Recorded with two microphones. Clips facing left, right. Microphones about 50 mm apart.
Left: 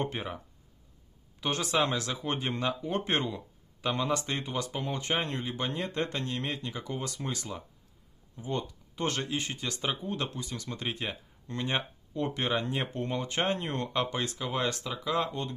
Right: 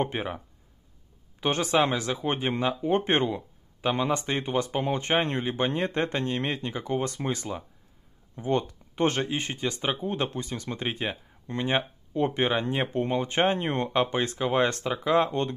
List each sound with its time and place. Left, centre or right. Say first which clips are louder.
0.0 s speech: right 5 dB; right
1.4 s speech: right 5 dB; right
8.4 s speech: right 7 dB; right
9.0 s speech: right 6 dB; right